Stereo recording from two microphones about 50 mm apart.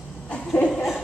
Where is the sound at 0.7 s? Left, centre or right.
Centre.